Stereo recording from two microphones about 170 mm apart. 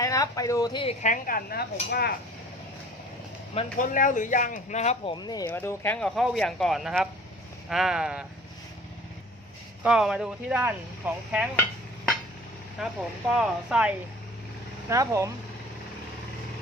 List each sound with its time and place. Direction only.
0.0 s speech: 20° left (ahead or behind)
1.0 s speech: 55° left (ahead or behind); by 2.1 s 70° left (ahead or behind)
3.8 s speech: 50° left (ahead or behind)
5.1 s speech: 25° left (ahead or behind)
5.5 s speech: 10° left (ahead or behind)
6.1 s speech: centre (ahead or behind)
9.8 s speech: 5° right (ahead or behind)
12.8 s speech: 5° right (ahead or behind)
14.8 s speech: 20° right (ahead or behind)